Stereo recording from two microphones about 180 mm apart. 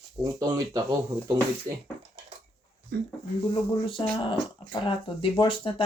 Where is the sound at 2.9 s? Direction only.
65° right (ahead or behind).